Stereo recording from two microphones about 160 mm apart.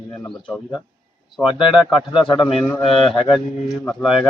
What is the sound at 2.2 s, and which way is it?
Speech, 30° left (ahead or behind).